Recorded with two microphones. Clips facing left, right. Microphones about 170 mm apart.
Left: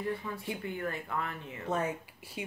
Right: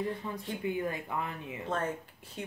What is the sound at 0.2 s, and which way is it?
Speech, 25° right (ahead or behind).